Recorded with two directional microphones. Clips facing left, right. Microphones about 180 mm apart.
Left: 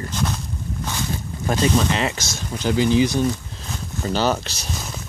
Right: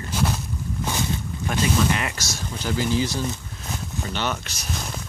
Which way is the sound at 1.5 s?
25° left (ahead or behind).